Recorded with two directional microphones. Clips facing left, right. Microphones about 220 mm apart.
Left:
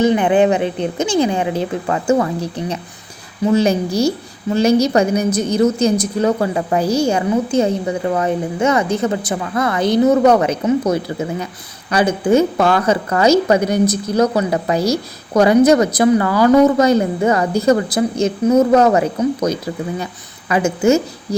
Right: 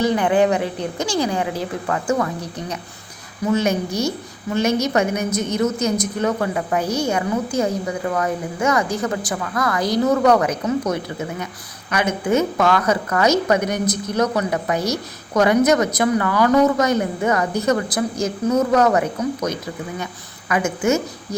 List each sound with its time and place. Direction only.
0.0 s a woman's voice: 20° left (ahead or behind)